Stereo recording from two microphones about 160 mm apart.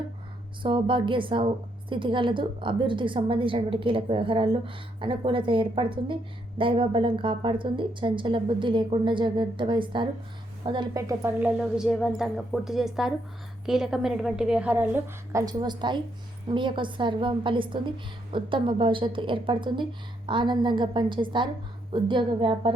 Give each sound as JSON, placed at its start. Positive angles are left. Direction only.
{"t": 0.6, "sound": "a woman's voice", "side_deg": -30}
{"t": 11.3, "sound": "a woman's voice", "side_deg": -10}